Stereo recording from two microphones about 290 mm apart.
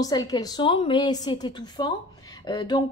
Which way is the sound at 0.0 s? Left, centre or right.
Centre.